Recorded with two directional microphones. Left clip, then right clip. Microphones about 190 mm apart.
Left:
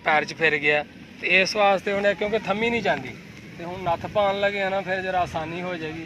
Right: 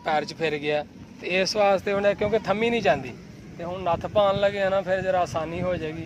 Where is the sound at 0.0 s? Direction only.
Centre (ahead or behind).